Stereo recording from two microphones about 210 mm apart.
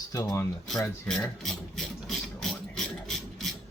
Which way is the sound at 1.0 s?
5° left (ahead or behind).